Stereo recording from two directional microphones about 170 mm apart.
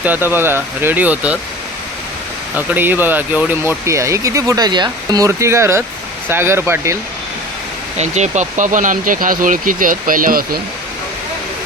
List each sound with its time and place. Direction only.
0.0 s speech: 10° right (ahead or behind)
2.6 s speech: 10° right (ahead or behind)
7.9 s speech: 40° right (ahead or behind)